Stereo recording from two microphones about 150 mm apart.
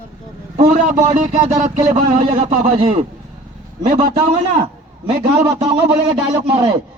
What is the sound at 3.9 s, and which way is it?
Speech, 70° right (ahead or behind).